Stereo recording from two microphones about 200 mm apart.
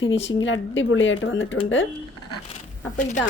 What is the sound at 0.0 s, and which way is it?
Speech, 70° left (ahead or behind).